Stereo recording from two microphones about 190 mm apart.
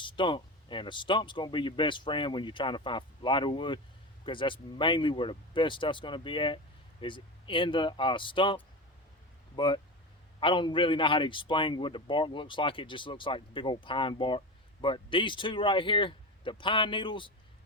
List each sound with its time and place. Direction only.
0.0 s a man's voice: 25° left (ahead or behind)